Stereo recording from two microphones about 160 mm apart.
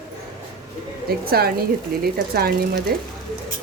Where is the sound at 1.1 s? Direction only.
75° right (ahead or behind).